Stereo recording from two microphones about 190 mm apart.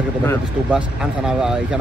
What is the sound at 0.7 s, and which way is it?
Speech, 5° right (ahead or behind).